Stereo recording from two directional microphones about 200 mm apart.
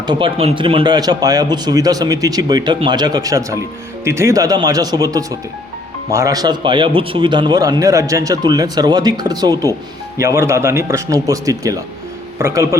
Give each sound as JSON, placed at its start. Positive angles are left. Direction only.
{"t": 0.1, "sound": "a man's voice", "side_deg": -25}